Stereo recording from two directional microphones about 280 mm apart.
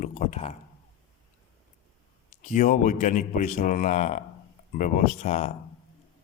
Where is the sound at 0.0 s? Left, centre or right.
Left.